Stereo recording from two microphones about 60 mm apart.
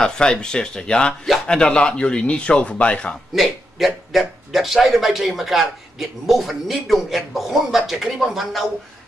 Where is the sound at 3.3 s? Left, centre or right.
Centre.